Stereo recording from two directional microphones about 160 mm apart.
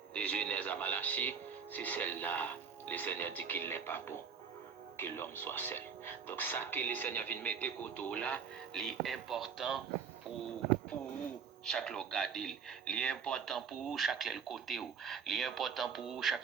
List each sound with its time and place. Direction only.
0.1 s speech: 5° left (ahead or behind)
11.6 s speech: 5° left (ahead or behind)